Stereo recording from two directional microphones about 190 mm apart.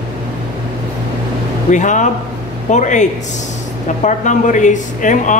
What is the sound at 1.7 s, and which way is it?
Speech, 40° left (ahead or behind).